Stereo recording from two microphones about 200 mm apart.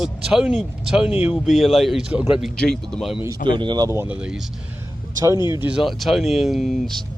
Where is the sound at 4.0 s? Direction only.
5° right (ahead or behind).